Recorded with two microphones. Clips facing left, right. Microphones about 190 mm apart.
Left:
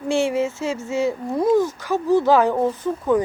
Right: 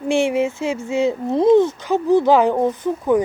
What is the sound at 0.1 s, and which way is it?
Speech, 15° right (ahead or behind).